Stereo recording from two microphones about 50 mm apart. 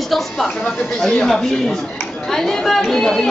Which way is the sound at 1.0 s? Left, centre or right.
Centre.